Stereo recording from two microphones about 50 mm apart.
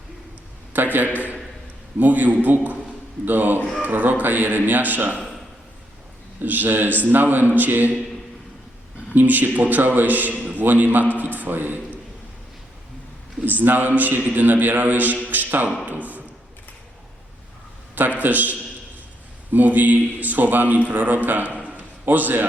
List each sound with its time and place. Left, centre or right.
0.7 s a sound: right
2.0 s a man's voice: right
6.4 s a man's voice: right
9.1 s a man's voice: right
13.4 s a man's voice: right
15.9 s a sound: right
18.2 s a man's voice: right
19.5 s a man's voice: right
21.6 s a sound: right